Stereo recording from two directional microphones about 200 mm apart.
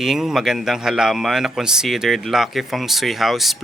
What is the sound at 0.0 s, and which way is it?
Speech, centre (ahead or behind).